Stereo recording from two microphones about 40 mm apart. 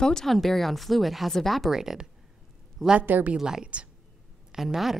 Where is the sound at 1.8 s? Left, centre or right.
Centre.